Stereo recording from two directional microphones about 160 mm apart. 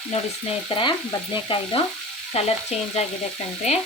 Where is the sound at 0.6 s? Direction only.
30° left (ahead or behind).